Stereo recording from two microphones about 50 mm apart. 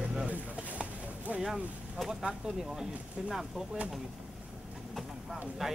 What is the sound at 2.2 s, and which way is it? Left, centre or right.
Speech, centre.